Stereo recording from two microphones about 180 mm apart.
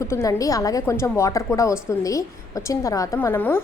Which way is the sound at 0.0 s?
15° left (ahead or behind).